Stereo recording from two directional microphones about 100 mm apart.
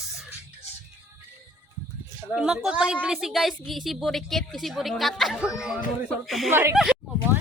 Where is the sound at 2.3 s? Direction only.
5° right (ahead or behind).